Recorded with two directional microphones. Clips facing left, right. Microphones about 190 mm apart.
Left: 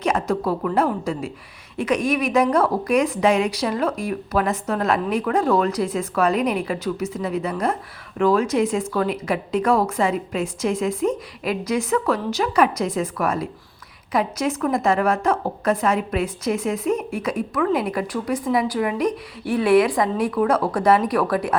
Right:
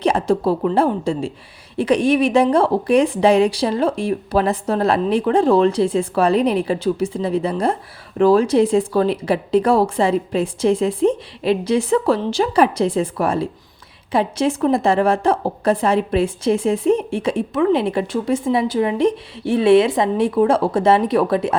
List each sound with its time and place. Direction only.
0.0 s a woman's voice: 30° right (ahead or behind)